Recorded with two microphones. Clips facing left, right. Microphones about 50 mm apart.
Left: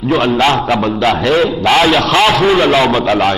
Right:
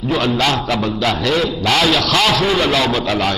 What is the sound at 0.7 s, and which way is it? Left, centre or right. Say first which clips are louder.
A man's voice: left 5 dB; left.